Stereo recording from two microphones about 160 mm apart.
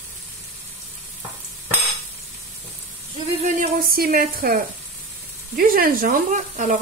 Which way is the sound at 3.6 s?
70° right (ahead or behind).